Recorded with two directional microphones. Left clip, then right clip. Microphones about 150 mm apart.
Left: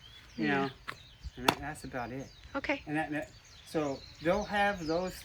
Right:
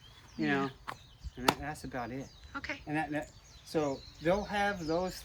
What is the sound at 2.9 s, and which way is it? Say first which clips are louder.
Speech: even; 5° right (ahead or behind).